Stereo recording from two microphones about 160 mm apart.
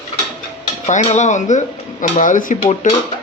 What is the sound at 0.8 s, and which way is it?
Dishes, 45° left (ahead or behind).